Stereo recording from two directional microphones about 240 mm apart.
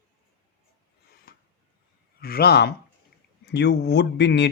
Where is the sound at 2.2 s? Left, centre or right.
Left.